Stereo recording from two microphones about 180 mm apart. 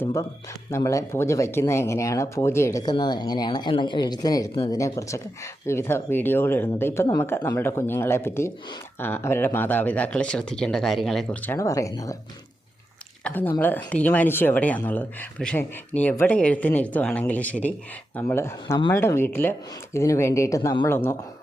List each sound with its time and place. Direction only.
0.0 s speech: 15° left (ahead or behind)
11.5 s speech: 15° left (ahead or behind)
13.2 s speech: 10° left (ahead or behind)